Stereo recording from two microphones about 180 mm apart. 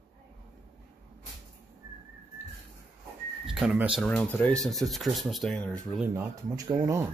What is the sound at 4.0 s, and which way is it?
Speech, 10° left (ahead or behind).